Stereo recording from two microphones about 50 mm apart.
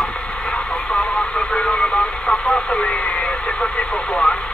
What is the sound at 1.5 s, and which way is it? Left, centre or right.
Radio, centre.